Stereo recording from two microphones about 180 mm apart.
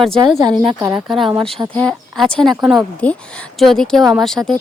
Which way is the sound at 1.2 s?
30° right (ahead or behind).